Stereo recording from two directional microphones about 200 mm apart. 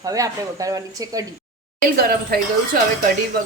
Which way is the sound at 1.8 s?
50° right (ahead or behind).